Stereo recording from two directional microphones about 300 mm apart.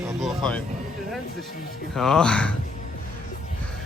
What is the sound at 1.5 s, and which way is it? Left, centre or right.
Speech, left.